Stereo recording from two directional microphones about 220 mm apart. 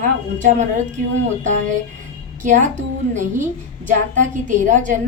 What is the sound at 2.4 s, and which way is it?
Speech, 35° right (ahead or behind).